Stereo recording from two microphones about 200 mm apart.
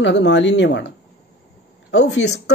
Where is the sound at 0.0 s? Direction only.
60° left (ahead or behind).